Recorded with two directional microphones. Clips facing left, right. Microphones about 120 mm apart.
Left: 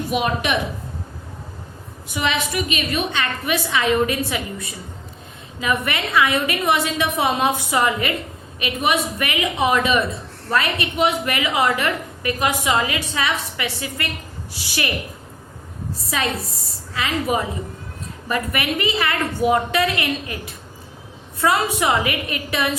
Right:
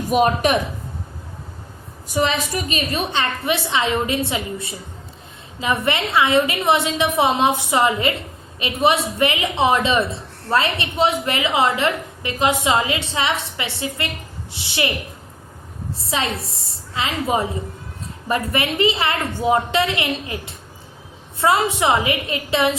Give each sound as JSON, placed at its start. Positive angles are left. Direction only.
{"t": 0.1, "sound": "a woman's voice", "side_deg": -40}
{"t": 2.1, "sound": "a woman's voice", "side_deg": -40}
{"t": 16.0, "sound": "a woman's voice", "side_deg": -25}